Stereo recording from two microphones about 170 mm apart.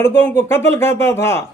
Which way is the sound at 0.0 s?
15° left (ahead or behind).